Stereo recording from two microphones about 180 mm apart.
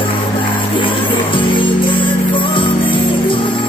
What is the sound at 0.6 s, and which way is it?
Music, 30° left (ahead or behind).